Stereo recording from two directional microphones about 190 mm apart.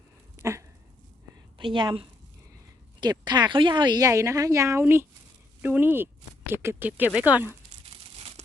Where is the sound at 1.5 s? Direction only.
25° right (ahead or behind); by 7.5 s 10° right (ahead or behind).